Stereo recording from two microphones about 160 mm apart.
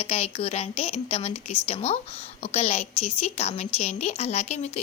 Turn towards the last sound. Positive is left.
turn(degrees=45)  # may be behind; listen again after turning